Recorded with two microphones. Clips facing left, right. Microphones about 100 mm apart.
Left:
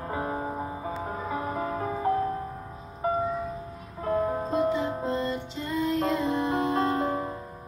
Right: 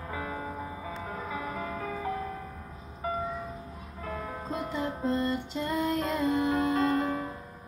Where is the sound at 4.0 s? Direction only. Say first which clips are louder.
Left 11 dB; 40° left (ahead or behind).